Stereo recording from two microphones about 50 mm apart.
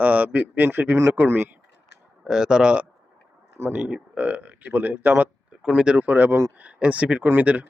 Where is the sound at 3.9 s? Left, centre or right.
Right.